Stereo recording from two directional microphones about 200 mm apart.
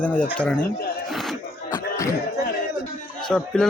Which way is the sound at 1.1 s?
Centre (ahead or behind).